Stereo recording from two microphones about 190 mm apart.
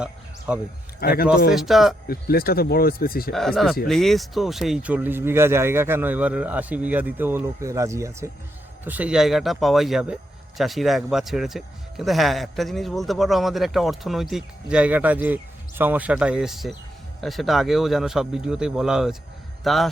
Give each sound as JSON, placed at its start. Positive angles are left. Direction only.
{"t": 0.0, "sound": "a sound", "side_deg": -5}
{"t": 0.9, "sound": "speech", "side_deg": 55}
{"t": 1.5, "sound": "speech", "side_deg": 0}
{"t": 2.0, "sound": "speech", "side_deg": 55}
{"t": 3.3, "sound": "speech", "side_deg": 0}